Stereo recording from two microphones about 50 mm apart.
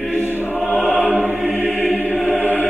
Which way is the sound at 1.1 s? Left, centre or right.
Right.